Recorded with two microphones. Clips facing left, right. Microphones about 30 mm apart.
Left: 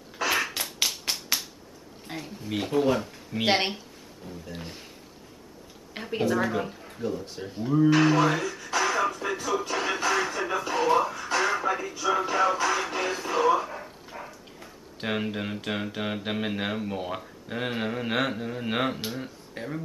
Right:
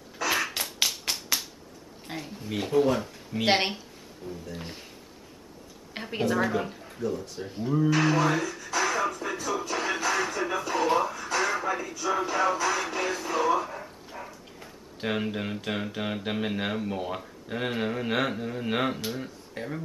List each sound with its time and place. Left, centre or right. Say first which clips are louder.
0.3 s tap: even; centre
2.0 s speech: even; centre
2.5 s speech: even; centre
4.2 s speech: right 4 dB; centre
4.6 s speech: even; centre
5.9 s speech: left 1 dB; centre
7.0 s speech: even; left
7.3 s speech: left 5 dB; centre
8.7 s music: left 1 dB; centre
12.2 s speech: left 1 dB; centre
12.6 s music: left 1 dB; centre
14.1 s speech: even; centre